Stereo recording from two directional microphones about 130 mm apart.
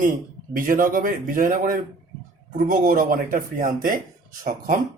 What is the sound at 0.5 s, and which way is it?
Speech, 90° right.